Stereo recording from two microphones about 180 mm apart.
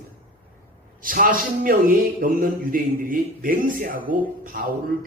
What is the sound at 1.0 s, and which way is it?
A man's voice, 50° right (ahead or behind).